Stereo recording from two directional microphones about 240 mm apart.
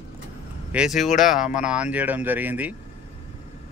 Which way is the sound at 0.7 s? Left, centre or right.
Centre.